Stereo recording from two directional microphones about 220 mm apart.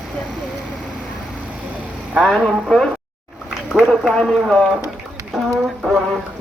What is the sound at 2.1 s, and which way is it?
Speech, centre (ahead or behind).